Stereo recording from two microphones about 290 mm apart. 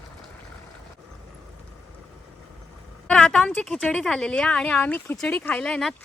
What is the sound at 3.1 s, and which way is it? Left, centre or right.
A woman's voice, centre.